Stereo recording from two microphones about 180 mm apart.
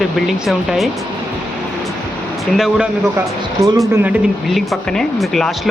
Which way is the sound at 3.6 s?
20° right (ahead or behind).